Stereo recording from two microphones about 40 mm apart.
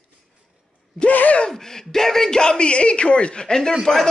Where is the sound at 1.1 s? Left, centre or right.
Left.